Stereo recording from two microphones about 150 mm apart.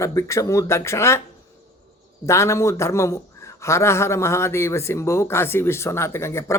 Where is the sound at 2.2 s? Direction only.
20° left (ahead or behind).